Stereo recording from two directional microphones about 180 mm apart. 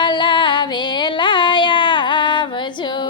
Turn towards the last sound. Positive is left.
turn(degrees=25)  # may be behind; listen again after turning